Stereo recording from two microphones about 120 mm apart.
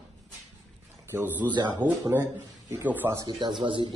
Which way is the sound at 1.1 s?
20° right (ahead or behind).